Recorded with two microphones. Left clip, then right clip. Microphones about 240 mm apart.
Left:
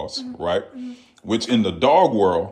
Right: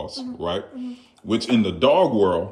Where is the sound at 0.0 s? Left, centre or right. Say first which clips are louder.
Left 3 dB; right.